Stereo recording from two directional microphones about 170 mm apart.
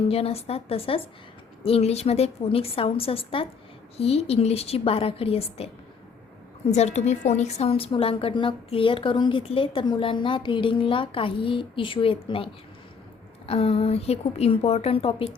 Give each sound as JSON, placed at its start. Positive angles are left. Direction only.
{"t": 0.1, "sound": "a woman's voice", "side_deg": 35}
{"t": 13.5, "sound": "a woman's voice", "side_deg": 35}